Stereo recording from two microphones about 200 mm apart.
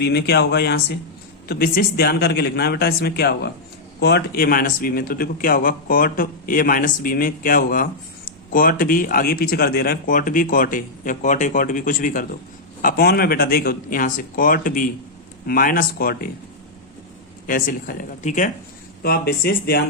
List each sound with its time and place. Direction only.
0.0 s speech: 55° left (ahead or behind)
17.4 s speech: 45° left (ahead or behind)
19.0 s speech: 50° left (ahead or behind)